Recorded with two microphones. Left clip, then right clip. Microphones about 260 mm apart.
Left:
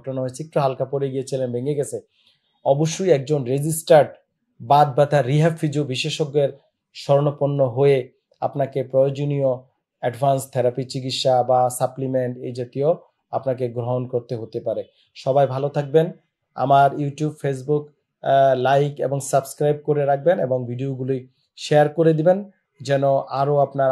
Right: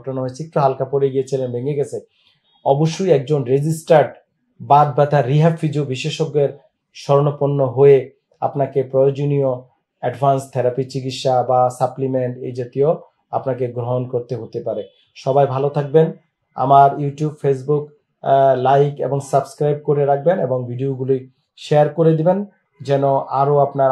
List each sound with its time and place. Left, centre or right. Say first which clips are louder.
0.0 s speech: right 2 dB; left